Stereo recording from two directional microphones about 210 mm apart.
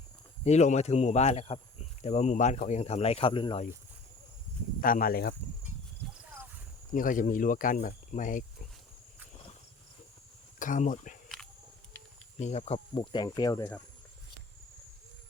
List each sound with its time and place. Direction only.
0.4 s speech: 35° left (ahead or behind)
4.8 s speech: 40° left (ahead or behind)
6.0 s clip-clop: centre (ahead or behind)
6.9 s speech: 40° left (ahead or behind)
10.6 s speech: 40° left (ahead or behind)
12.4 s speech: 30° left (ahead or behind); by 13.8 s 10° left (ahead or behind)